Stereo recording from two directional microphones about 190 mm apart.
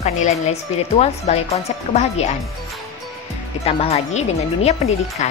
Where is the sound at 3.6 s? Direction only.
35° left (ahead or behind).